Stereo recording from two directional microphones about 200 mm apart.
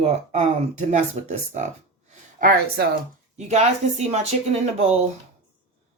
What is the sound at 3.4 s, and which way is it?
Speech, 35° right (ahead or behind).